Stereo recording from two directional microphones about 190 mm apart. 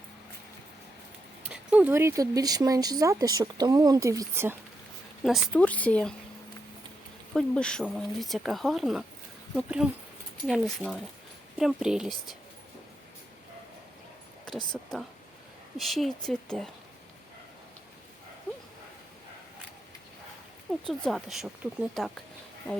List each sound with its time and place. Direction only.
1.5 s speech: 5° right (ahead or behind)
5.2 s speech: 5° left (ahead or behind)
7.3 s speech: 5° left (ahead or behind)
14.7 s speech: centre (ahead or behind)
20.8 s speech: centre (ahead or behind)